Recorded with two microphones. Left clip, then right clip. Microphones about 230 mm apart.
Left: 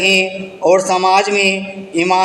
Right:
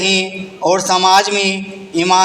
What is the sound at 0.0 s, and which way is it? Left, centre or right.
A man's voice, right.